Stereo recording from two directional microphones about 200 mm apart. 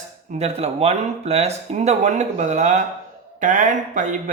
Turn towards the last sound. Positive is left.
turn(degrees=-40)  # may be behind; listen again after turning